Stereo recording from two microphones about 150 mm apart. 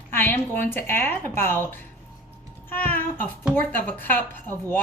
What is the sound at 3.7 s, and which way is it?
Speech, 10° left (ahead or behind).